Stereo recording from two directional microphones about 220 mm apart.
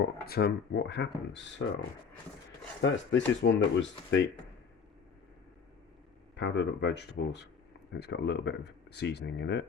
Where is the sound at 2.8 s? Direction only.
55° left (ahead or behind).